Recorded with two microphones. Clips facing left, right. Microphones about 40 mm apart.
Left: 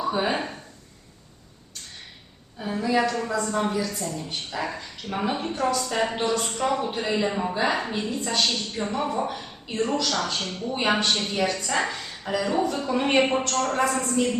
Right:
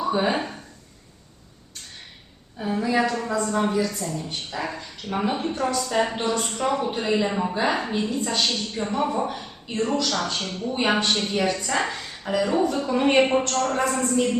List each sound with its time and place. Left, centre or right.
0.0 s speech: centre
2.6 s a woman's voice: centre